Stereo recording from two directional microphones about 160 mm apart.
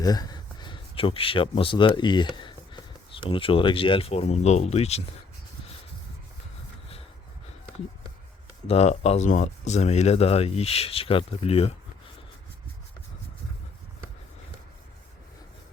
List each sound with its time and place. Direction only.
0.0 s speech: 25° left (ahead or behind); by 5.0 s 40° left (ahead or behind)
8.6 s speech: 40° left (ahead or behind)